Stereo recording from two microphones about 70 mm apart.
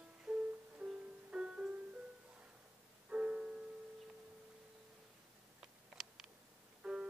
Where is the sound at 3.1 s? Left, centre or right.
Centre.